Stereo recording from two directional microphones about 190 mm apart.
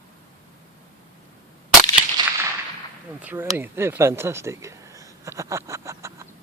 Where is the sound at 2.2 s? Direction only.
25° right (ahead or behind).